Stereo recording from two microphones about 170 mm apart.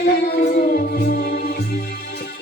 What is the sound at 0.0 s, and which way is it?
Music, 70° left (ahead or behind).